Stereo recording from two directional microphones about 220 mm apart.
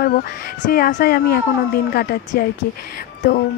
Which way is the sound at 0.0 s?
40° left (ahead or behind).